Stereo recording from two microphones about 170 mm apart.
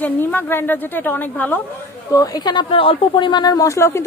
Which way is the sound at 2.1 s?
20° left (ahead or behind).